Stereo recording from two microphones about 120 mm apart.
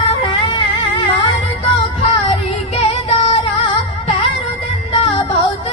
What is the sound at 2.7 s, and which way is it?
Music, 55° left (ahead or behind).